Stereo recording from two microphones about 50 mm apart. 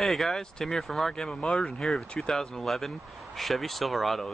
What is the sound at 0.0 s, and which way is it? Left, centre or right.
Speech, centre.